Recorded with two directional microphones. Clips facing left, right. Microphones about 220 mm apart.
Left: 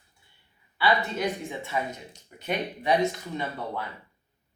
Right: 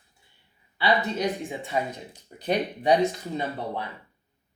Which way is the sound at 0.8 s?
20° right (ahead or behind).